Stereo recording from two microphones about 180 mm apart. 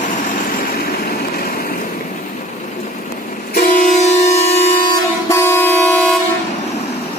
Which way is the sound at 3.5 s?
45° left (ahead or behind).